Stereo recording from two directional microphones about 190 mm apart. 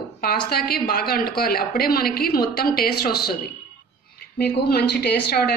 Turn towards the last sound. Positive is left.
turn(degrees=60)  # may be behind; listen again after turning